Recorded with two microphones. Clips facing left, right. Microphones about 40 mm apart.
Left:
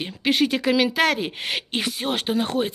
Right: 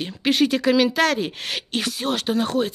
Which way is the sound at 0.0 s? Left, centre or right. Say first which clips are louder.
Right 1 dB; centre.